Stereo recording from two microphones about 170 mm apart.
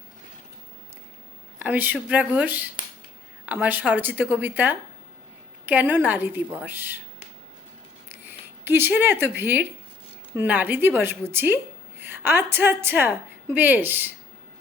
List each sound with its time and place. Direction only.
1.5 s a woman's voice: 10° right (ahead or behind)
8.6 s a woman's voice: 15° right (ahead or behind)